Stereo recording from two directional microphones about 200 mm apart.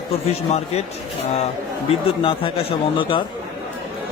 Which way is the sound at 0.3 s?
35° left (ahead or behind).